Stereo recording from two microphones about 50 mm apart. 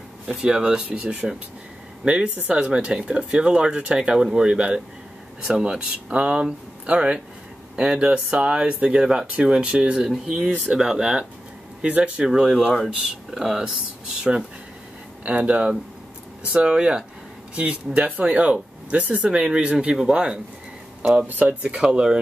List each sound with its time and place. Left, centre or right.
0.4 s speech: centre
10.0 s speech: centre
15.2 s speech: right
19.3 s speech: centre
21.3 s speech: right
21.6 s speech: right